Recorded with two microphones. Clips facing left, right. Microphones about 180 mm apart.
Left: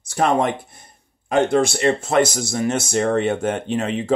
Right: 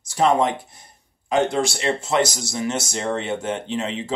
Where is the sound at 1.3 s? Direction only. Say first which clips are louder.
Left 3 dB; 55° left (ahead or behind).